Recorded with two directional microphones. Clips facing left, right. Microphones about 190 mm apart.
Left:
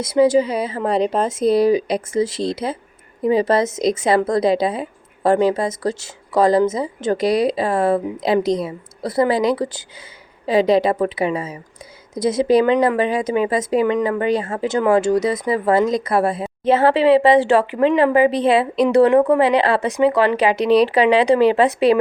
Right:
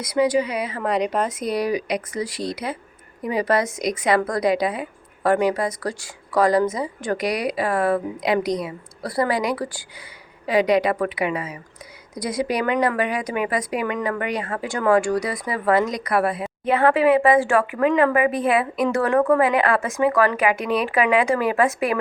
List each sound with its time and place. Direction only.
0.0 s a woman's voice: 25° left (ahead or behind)
19.1 s a woman's voice: 20° left (ahead or behind)
19.4 s a woman's voice: 30° left (ahead or behind)